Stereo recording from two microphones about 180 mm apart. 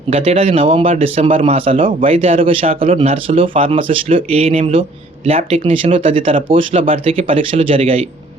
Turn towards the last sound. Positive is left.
turn(degrees=-30)  # may be behind; listen again after turning